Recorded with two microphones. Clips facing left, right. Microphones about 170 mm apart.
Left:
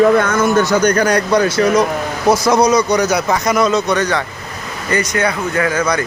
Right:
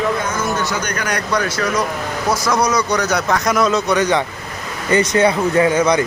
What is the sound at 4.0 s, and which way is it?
Speech, 20° right (ahead or behind).